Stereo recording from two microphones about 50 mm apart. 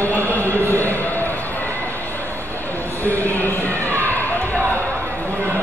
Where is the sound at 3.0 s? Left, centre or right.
Left.